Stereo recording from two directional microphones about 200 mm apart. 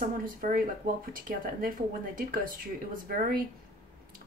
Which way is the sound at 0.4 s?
40° right (ahead or behind).